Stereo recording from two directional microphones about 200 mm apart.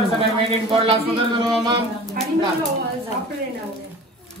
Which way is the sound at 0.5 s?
30° right (ahead or behind).